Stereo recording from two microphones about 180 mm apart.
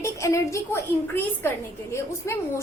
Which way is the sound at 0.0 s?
15° left (ahead or behind).